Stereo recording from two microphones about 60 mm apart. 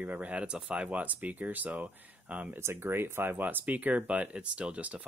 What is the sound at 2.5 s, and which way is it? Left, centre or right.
Speech, right.